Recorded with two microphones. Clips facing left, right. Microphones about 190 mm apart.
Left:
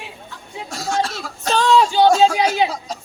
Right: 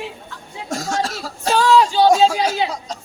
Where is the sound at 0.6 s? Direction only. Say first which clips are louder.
Even; 45° right (ahead or behind).